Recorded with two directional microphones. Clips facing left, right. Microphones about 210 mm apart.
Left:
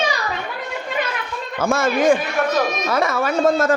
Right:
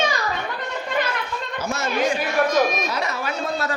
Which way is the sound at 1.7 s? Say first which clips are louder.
Left 6 dB; 50° left (ahead or behind).